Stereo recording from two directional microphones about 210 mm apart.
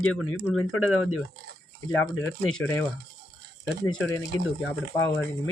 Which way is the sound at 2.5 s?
5° left (ahead or behind).